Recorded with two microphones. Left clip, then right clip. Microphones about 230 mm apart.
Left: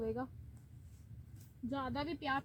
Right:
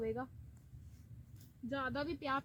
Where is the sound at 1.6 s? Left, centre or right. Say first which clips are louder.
Right 1 dB; right.